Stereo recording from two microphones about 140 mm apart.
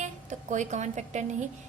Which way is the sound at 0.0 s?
60° right (ahead or behind).